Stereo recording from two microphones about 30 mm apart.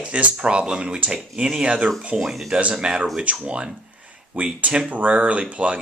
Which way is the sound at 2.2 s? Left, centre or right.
Centre.